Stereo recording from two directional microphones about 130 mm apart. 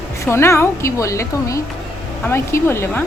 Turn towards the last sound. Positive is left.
turn(degrees=15)  # may be behind; listen again after turning